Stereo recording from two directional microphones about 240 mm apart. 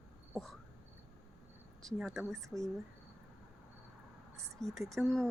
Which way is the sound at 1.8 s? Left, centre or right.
Centre.